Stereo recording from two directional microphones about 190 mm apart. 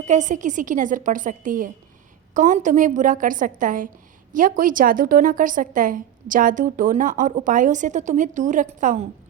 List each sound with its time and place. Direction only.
0.0 s a woman's voice: 40° right (ahead or behind)